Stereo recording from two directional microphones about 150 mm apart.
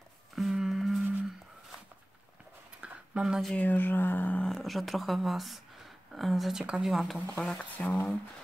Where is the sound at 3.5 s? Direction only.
10° left (ahead or behind).